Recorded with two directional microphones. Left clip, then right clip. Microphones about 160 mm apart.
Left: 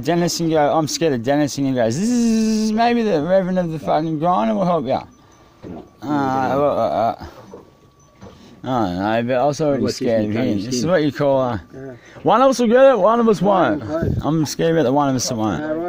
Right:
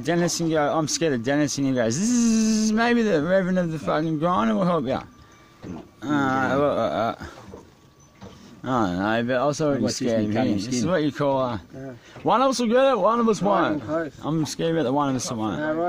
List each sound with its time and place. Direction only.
0.0 s speech: 10° left (ahead or behind); by 5.0 s 5° right (ahead or behind)
6.0 s a sound: 5° right (ahead or behind)
8.6 s speech: centre (ahead or behind)
12.3 s a man's voice: 20° left (ahead or behind)